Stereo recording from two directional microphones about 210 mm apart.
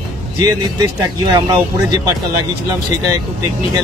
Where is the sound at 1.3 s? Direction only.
20° right (ahead or behind).